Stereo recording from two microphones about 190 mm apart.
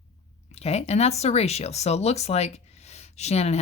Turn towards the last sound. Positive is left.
turn(degrees=35)  # may be behind; listen again after turning